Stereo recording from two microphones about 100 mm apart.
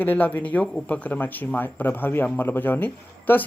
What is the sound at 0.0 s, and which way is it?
Speech, 20° left (ahead or behind).